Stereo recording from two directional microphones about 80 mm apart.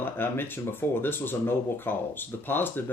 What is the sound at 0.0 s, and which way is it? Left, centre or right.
Speech, left.